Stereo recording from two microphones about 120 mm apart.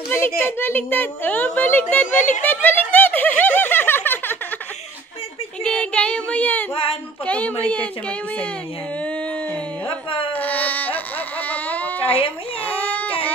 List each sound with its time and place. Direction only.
0.1 s a child's voice: 20° left (ahead or behind)
2.4 s snicker: 15° left (ahead or behind)
5.6 s a child's voice: 10° left (ahead or behind)
6.7 s speech: 50° left (ahead or behind)
7.2 s a child's voice: 10° left (ahead or behind)
10.3 s baby cry: 15° left (ahead or behind)